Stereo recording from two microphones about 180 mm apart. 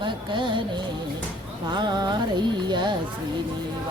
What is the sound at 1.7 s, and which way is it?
Speech, 25° right (ahead or behind).